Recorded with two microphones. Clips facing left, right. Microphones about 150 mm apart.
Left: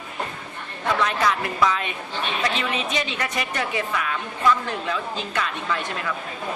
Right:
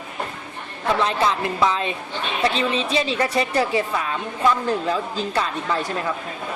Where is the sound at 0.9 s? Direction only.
30° right (ahead or behind).